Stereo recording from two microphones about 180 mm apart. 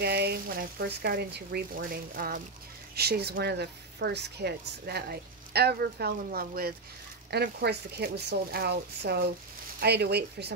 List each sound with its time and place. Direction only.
0.0 s speech: 60° right (ahead or behind)